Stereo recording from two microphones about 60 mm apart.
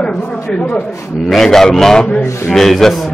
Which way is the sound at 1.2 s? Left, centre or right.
Centre.